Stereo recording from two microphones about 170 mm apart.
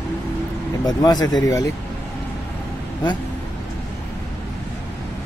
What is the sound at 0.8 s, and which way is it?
Speech, 25° left (ahead or behind).